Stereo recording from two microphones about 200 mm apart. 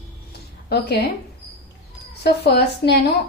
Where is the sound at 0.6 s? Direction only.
55° left (ahead or behind).